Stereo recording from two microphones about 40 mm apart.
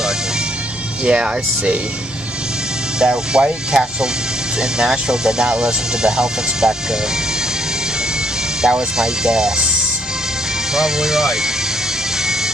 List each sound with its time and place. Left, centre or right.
1.0 s speech: right
3.0 s speech: right
8.6 s speech: centre